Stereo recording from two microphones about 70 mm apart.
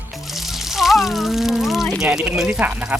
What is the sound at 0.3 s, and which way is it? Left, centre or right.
Water, centre.